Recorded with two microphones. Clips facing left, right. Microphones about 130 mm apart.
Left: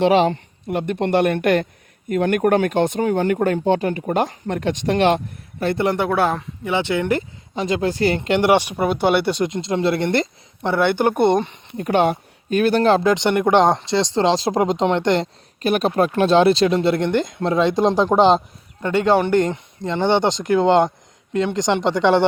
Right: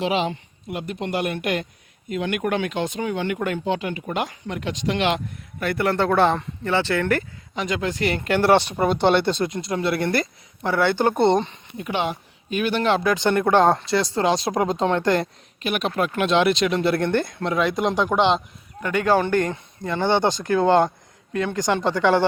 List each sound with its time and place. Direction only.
0.1 s speech: 45° left (ahead or behind); by 6.1 s 20° left (ahead or behind)
6.1 s speech: 5° left (ahead or behind)
6.7 s speech: 15° left (ahead or behind)
7.5 s speech: 30° left (ahead or behind); by 9.5 s 10° left (ahead or behind)
9.5 s speech: 25° left (ahead or behind)
11.8 s speech: 50° left (ahead or behind)
13.0 s speech: 20° left (ahead or behind)
15.6 s speech: 35° left (ahead or behind); by 22.2 s 20° left (ahead or behind)